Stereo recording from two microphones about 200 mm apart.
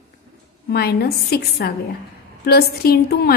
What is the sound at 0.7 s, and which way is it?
A woman's voice, 50° left (ahead or behind).